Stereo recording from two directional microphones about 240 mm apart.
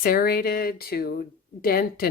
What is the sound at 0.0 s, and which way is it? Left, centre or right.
A woman's voice, left.